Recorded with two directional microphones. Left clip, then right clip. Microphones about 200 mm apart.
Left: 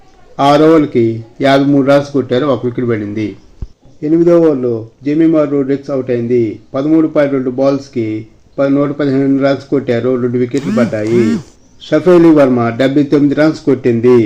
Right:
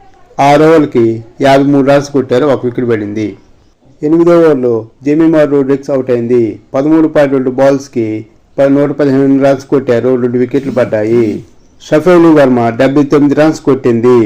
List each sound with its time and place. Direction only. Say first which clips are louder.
0.3 s a man's voice: right 2 dB; 15° right (ahead or behind)
4.6 s a man's voice: right 5 dB; 15° right (ahead or behind)